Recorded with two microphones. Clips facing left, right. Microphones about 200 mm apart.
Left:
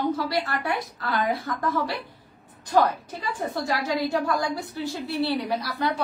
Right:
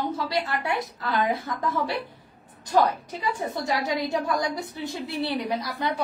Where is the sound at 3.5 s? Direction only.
20° right (ahead or behind).